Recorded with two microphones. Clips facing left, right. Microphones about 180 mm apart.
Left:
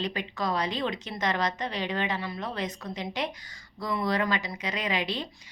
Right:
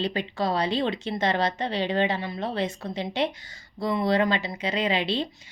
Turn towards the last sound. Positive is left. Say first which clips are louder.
# right 5 dB
turn(degrees=-30)  # may be behind; listen again after turning